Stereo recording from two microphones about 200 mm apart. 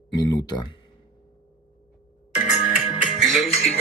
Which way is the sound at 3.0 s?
Centre (ahead or behind).